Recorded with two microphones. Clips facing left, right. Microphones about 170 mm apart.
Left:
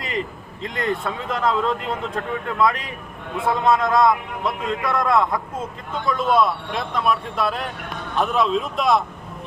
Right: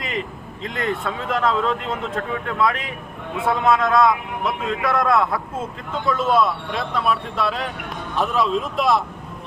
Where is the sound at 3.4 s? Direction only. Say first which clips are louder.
Even; centre (ahead or behind).